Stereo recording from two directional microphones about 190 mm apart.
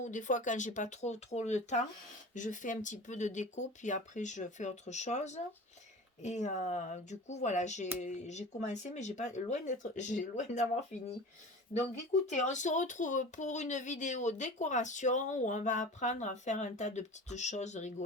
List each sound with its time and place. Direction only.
0.0 s speech: 40° left (ahead or behind)
12.3 s speech: 40° left (ahead or behind)